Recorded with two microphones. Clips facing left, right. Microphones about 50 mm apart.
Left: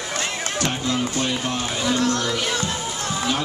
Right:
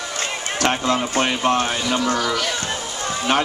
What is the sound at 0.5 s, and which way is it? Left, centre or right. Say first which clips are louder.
Speech: right 5 dB; right.